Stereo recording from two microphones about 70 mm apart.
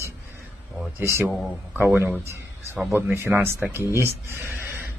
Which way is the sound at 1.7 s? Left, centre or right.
Right.